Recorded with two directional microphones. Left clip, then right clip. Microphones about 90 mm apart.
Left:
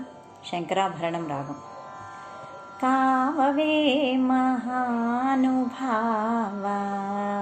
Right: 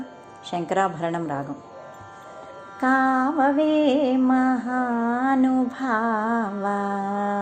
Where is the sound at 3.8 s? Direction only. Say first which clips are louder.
Right 3 dB; 65° right (ahead or behind).